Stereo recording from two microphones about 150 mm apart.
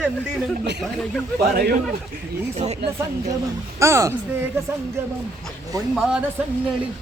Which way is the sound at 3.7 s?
20° right (ahead or behind).